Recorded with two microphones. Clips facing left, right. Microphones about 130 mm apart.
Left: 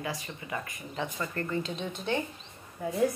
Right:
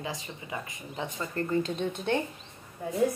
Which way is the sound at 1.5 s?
50° right (ahead or behind).